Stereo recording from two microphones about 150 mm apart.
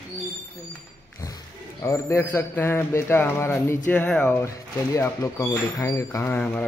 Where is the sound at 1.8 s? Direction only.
20° left (ahead or behind).